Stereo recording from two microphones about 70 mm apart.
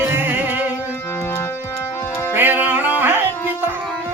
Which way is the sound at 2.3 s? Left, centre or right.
Right.